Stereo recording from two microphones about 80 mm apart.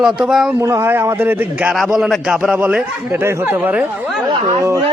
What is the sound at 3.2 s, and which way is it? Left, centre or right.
Speech, right.